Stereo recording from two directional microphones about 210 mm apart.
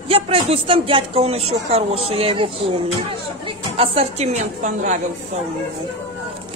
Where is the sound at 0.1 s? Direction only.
25° right (ahead or behind).